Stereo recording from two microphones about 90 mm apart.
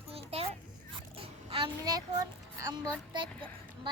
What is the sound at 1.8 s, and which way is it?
Child singing, 40° right (ahead or behind).